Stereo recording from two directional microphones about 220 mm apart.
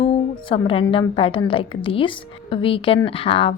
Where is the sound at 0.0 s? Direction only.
25° left (ahead or behind).